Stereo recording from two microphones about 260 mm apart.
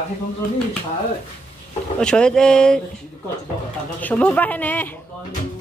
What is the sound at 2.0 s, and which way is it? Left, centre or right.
Speech, centre.